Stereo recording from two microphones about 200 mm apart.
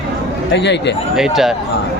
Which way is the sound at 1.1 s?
Centre (ahead or behind).